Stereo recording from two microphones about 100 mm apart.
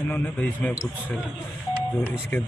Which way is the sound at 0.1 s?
15° left (ahead or behind).